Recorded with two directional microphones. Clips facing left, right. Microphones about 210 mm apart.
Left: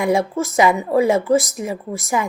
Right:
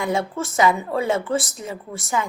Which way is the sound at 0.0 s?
15° left (ahead or behind).